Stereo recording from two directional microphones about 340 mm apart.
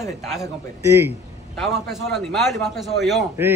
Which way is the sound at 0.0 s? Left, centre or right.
Centre.